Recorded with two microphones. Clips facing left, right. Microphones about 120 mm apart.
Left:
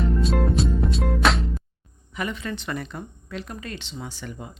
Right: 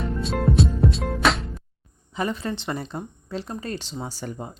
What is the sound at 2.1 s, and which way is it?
Speech, 35° right (ahead or behind).